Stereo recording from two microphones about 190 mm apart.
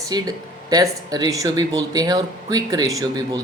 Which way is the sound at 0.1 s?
20° right (ahead or behind).